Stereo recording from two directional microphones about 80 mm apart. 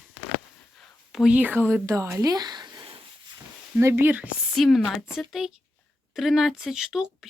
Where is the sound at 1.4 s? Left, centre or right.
Right.